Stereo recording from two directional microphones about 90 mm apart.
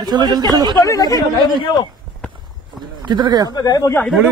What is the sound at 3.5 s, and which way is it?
Speech, 45° left (ahead or behind).